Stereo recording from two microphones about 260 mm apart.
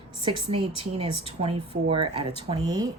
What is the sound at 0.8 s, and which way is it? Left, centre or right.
Speech, right.